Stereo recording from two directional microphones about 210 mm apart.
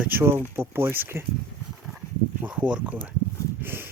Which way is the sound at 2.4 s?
5° right (ahead or behind).